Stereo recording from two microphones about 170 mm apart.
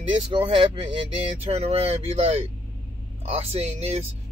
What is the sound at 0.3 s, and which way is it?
Speech, 30° right (ahead or behind).